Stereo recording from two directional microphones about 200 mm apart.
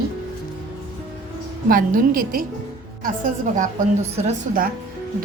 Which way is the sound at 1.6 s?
45° right (ahead or behind).